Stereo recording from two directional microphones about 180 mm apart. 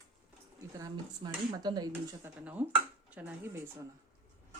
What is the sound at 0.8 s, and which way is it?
Speech, 20° right (ahead or behind).